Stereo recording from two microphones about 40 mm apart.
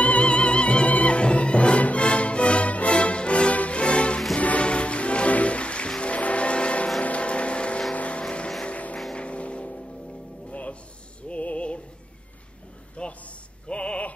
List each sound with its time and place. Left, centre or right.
0.0 s music: left
7.0 s vehicle: left
8.2 s vehicle: left
10.5 s music: left
13.0 s a sound: left